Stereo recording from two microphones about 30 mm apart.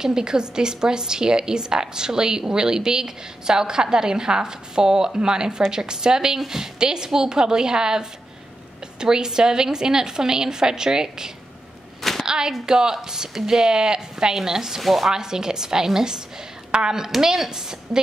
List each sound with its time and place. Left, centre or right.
0.0 s a woman's voice: right
6.8 s a woman's voice: right
14.8 s chopping: centre
15.0 s a woman's voice: centre